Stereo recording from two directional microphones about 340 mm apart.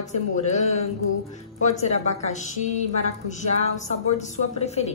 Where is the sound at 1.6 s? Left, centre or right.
Centre.